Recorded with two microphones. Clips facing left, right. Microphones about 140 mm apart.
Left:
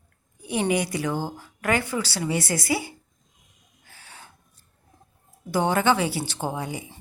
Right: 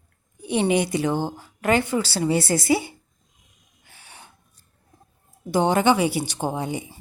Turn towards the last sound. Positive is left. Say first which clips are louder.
# right 3 dB
turn(degrees=-20)  # may be behind; listen again after turning